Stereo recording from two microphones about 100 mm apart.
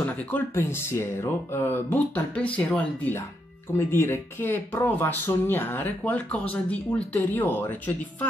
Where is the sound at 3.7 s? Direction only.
25° left (ahead or behind).